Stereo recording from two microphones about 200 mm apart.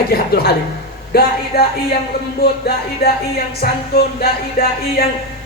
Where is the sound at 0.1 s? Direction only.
50° left (ahead or behind).